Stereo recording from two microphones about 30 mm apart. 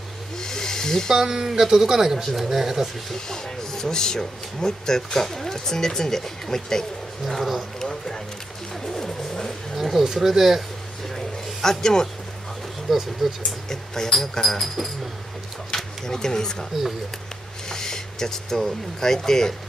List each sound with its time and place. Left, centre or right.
0.4 s snake: centre
1.1 s speech: centre
3.3 s speech: centre
8.8 s music: centre
9.8 s speech: centre
11.1 s a sound: centre
12.9 s speech: centre
13.7 s speech: centre
17.6 s speech: centre